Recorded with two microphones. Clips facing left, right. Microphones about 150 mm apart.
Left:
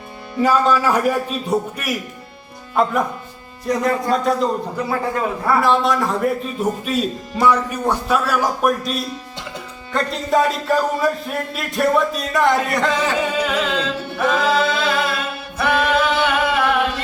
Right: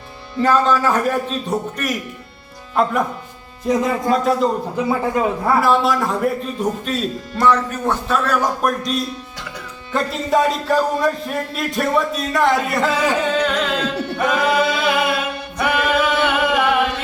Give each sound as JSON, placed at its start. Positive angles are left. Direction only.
{"t": 0.4, "sound": "a man's voice", "side_deg": 10}
{"t": 4.9, "sound": "a man's voice", "side_deg": -20}
{"t": 5.5, "sound": "a man's voice", "side_deg": -5}
{"t": 13.1, "sound": "a man's voice", "side_deg": 10}
{"t": 15.5, "sound": "singing", "side_deg": -5}